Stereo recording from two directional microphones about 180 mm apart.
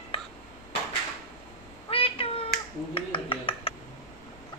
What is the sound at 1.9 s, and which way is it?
Cat, 30° left (ahead or behind).